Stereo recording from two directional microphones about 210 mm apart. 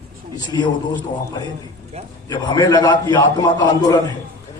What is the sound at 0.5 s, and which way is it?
Speech, 15° left (ahead or behind).